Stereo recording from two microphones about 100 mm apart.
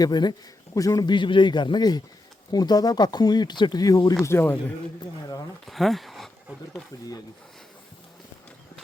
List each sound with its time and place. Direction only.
0.0 s a man's voice: 45° left (ahead or behind)
1.1 s speech: 55° left (ahead or behind); by 4.2 s 35° left (ahead or behind)
4.2 s speech: 25° left (ahead or behind)
5.6 s speech: centre (ahead or behind)